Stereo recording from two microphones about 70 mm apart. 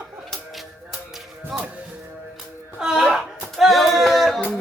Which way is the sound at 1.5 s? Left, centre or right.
Centre.